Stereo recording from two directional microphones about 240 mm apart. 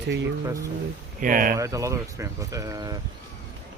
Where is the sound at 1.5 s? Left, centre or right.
Centre.